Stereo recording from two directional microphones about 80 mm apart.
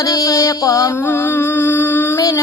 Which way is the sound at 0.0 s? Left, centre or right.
Left.